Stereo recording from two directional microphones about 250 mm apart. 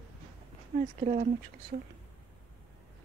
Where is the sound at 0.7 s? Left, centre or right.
Right.